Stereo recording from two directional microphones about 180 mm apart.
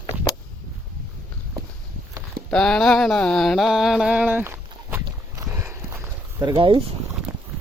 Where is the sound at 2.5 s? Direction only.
5° left (ahead or behind).